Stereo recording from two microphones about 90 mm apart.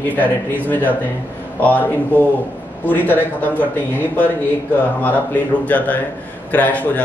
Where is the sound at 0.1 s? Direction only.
20° left (ahead or behind).